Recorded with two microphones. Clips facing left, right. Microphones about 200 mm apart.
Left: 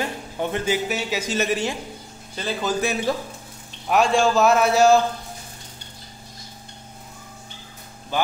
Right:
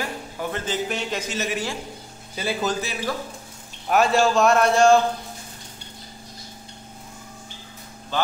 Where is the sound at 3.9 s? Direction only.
Centre (ahead or behind).